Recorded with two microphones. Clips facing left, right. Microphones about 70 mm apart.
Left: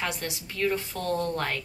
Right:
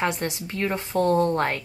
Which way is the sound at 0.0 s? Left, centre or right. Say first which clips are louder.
Right 6 dB; right.